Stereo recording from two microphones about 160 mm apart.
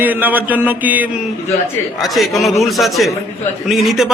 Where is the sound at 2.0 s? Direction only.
Centre (ahead or behind).